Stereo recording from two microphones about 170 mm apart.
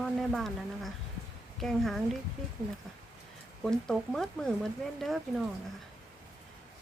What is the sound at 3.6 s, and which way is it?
Speech, 5° left (ahead or behind).